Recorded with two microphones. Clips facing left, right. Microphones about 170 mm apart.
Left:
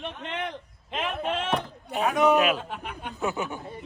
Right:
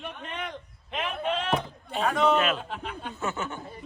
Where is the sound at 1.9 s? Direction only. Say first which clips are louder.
Left 2 dB; 10° left (ahead or behind).